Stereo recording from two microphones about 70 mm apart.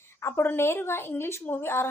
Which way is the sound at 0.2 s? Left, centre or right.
Left.